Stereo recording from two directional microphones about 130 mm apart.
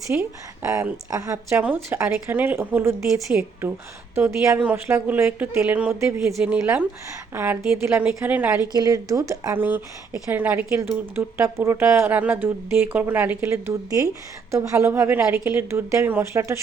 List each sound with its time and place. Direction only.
0.2 s a woman's voice: 25° right (ahead or behind)
6.2 s speech: 5° right (ahead or behind)
8.7 s a woman's voice: 30° right (ahead or behind)